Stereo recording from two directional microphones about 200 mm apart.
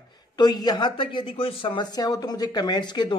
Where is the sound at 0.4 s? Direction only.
20° left (ahead or behind).